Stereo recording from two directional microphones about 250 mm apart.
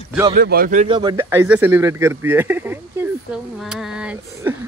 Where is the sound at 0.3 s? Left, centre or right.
Right.